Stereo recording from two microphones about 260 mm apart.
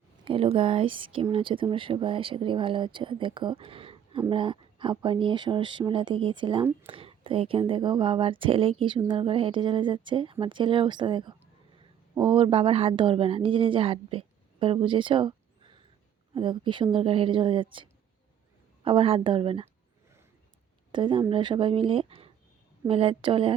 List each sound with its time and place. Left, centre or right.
0.3 s a woman's voice: right
20.9 s speech: centre